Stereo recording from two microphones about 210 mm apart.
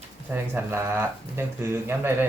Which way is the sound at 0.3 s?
10° right (ahead or behind).